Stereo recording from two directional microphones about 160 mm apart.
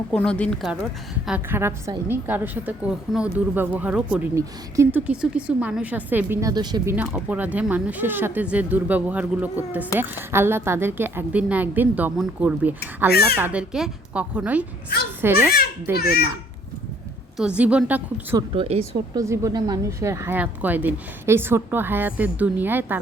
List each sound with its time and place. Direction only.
0.1 s a woman's voice: 5° left (ahead or behind)
1.3 s a woman's voice: 15° right (ahead or behind)
6.5 s speech: 25° right (ahead or behind)
6.9 s a woman's voice: 10° right (ahead or behind)
16.0 s a child's voice: 75° left (ahead or behind)
17.6 s a woman's voice: 10° right (ahead or behind)
18.3 s speech: 35° right (ahead or behind)
19.1 s a woman's voice: 20° right (ahead or behind)